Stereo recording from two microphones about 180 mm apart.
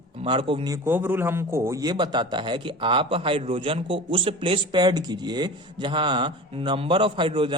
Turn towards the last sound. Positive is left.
turn(degrees=-30)  # may be behind; listen again after turning